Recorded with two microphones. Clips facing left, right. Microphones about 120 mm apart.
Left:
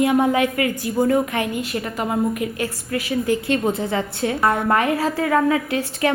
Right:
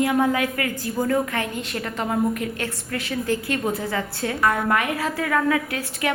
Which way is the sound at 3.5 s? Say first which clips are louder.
Left 4 dB; 25° left (ahead or behind).